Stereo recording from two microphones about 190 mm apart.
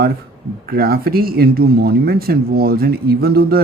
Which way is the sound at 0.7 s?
55° right (ahead or behind).